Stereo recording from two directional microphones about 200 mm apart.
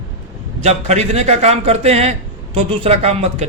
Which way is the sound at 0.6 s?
35° right (ahead or behind).